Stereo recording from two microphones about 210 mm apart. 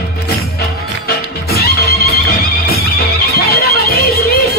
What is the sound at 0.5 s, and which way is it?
Music, 50° left (ahead or behind).